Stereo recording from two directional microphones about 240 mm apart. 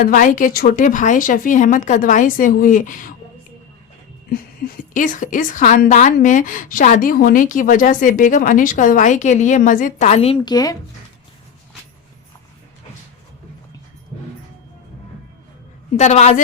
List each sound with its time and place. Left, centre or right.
0.0 s a woman's voice: left
4.3 s a woman's voice: left; by 10.8 s centre
16.0 s a woman's voice: left